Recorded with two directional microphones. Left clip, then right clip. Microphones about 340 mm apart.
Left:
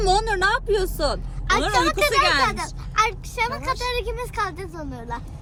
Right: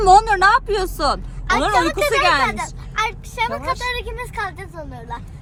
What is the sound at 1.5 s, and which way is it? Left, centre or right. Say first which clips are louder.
Speech: right 3 dB; centre.